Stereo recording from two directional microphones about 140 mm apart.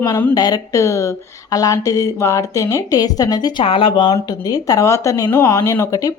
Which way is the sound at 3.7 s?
40° left (ahead or behind).